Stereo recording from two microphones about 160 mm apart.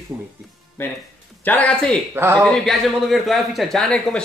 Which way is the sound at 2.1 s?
15° right (ahead or behind).